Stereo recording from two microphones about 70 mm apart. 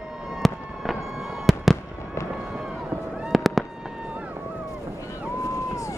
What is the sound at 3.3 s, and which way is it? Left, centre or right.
Fireworks, centre.